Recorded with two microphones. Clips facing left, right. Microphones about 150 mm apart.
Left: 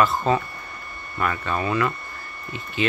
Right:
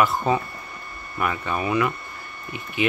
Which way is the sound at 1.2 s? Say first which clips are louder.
Even; 15° right (ahead or behind).